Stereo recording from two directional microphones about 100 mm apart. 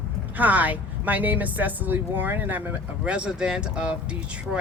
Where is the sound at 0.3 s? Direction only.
15° right (ahead or behind).